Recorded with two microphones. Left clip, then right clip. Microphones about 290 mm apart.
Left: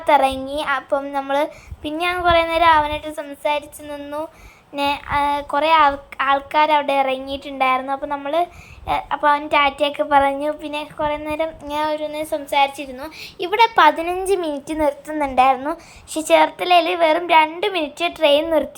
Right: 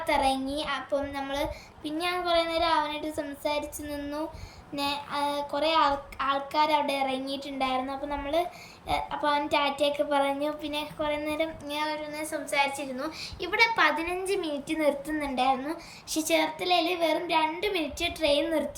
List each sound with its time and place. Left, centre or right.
0.0 s a woman's voice: centre